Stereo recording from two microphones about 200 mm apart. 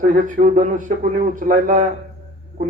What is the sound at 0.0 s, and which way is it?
A man's voice, 40° right (ahead or behind).